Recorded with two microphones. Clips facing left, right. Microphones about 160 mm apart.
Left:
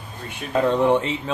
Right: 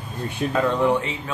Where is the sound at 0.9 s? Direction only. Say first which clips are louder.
Left 3 dB; 20° left (ahead or behind).